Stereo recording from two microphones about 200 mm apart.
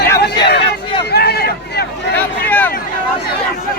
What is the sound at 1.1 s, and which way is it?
Vehicle, 50° left (ahead or behind).